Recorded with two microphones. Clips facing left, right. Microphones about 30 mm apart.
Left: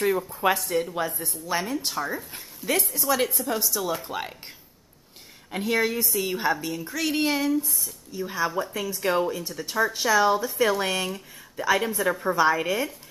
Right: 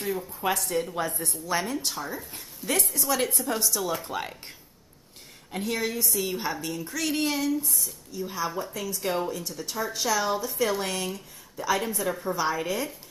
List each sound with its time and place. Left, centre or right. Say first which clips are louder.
0.3 s speech: left 5 dB; left
0.6 s a woman's voice: left 2 dB; centre
5.5 s speech: left 5 dB; centre